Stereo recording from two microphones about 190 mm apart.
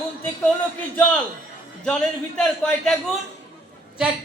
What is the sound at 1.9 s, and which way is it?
A man's voice, 5° left (ahead or behind).